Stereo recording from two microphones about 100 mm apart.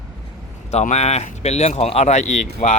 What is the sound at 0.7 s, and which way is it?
Speech, 90° left.